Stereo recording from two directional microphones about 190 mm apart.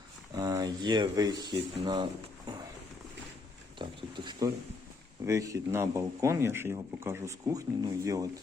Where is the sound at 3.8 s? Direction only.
25° right (ahead or behind).